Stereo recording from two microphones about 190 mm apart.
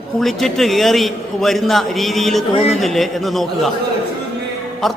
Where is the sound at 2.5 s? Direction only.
30° left (ahead or behind).